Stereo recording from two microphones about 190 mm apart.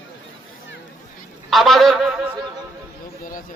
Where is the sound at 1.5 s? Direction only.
Centre (ahead or behind).